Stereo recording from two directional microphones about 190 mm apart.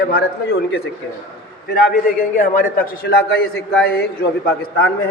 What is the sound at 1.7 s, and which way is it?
A man's voice, 45° left (ahead or behind).